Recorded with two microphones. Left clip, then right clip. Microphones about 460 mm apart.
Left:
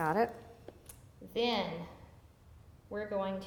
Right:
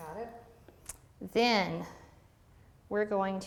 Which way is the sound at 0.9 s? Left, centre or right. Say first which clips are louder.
Right 7 dB; right.